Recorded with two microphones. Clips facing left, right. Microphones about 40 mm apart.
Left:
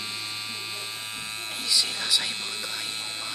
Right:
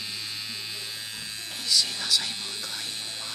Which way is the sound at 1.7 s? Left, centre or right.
Centre.